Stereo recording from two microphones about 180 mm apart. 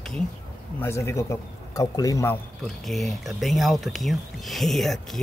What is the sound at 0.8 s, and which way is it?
A man's voice, 15° left (ahead or behind).